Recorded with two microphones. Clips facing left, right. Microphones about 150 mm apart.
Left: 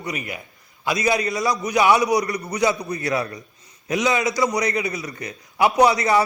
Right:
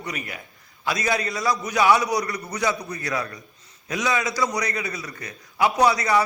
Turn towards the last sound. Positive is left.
turn(degrees=25)  # may be behind; listen again after turning